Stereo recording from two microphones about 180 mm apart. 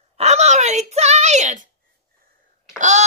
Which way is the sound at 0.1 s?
35° right (ahead or behind).